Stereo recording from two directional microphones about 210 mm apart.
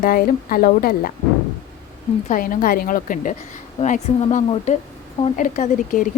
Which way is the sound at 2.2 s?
40° left (ahead or behind).